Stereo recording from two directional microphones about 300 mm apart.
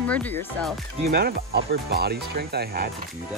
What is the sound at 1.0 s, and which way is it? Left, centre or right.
Speech, right.